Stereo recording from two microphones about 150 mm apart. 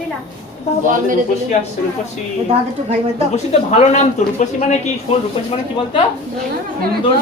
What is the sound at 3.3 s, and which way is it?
Speech, 50° left (ahead or behind).